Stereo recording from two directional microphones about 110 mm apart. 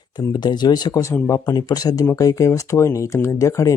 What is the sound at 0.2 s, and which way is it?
Speech, 35° left (ahead or behind).